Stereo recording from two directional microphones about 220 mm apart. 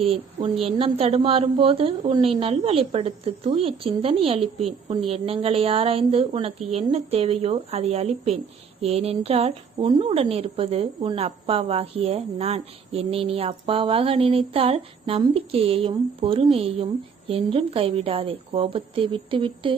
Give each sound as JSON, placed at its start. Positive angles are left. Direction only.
{"t": 0.1, "sound": "a woman's voice", "side_deg": -25}